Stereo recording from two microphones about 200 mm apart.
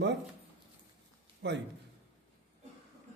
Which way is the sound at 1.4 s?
60° right (ahead or behind).